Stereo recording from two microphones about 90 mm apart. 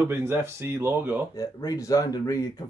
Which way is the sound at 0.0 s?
30° right (ahead or behind).